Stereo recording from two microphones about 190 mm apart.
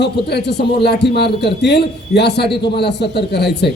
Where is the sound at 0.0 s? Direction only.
60° left (ahead or behind).